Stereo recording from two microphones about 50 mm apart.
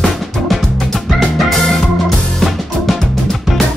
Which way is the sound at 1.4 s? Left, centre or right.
Centre.